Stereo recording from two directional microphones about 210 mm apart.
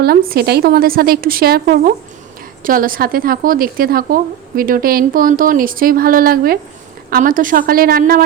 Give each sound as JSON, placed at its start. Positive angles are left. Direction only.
{"t": 0.0, "sound": "speech", "side_deg": -45}